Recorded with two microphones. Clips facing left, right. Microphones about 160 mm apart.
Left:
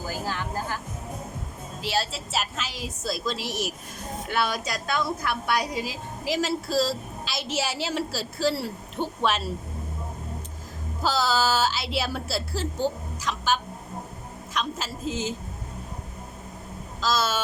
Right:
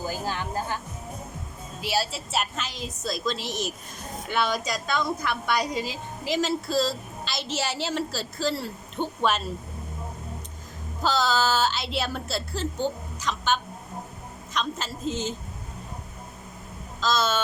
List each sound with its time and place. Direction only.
0.3 s music: 20° right (ahead or behind)
1.8 s a woman's voice: 10° right (ahead or behind)
11.0 s a woman's voice: 5° left (ahead or behind)
17.0 s a woman's voice: 5° left (ahead or behind)